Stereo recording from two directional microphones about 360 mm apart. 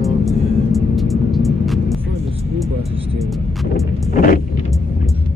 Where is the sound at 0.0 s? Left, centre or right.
Centre.